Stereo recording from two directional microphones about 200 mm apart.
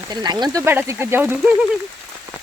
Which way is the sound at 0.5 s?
10° right (ahead or behind).